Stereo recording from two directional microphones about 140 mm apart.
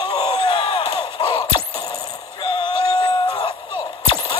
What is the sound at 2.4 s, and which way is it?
Music, 35° left (ahead or behind).